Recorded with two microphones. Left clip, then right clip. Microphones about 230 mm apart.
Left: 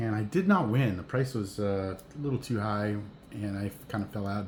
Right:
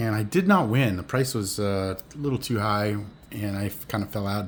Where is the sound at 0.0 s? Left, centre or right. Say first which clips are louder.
Right 5 dB; right.